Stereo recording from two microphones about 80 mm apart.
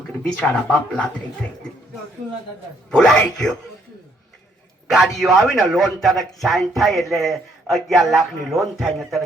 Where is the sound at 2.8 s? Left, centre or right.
Centre.